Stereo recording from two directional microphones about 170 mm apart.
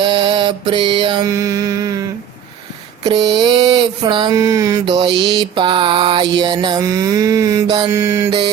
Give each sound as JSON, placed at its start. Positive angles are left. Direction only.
{"t": 0.0, "sound": "mantra", "side_deg": -30}
{"t": 4.4, "sound": "music", "side_deg": -20}
{"t": 4.9, "sound": "music", "side_deg": -30}
{"t": 7.9, "sound": "mantra", "side_deg": -15}